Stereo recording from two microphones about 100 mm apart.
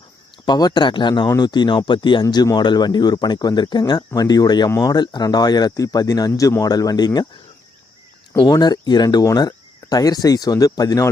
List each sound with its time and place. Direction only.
0.4 s speech: 45° left (ahead or behind)
8.4 s speech: 40° left (ahead or behind)